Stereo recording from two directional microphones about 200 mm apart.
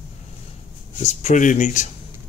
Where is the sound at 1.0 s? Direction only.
35° left (ahead or behind).